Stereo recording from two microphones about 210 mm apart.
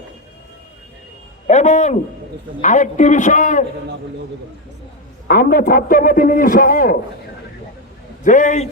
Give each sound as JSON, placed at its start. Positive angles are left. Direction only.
{"t": 1.5, "sound": "a sound", "side_deg": 35}
{"t": 2.6, "sound": "a man's voice", "side_deg": 35}
{"t": 5.3, "sound": "a man's voice", "side_deg": 45}
{"t": 8.2, "sound": "a man's voice", "side_deg": 35}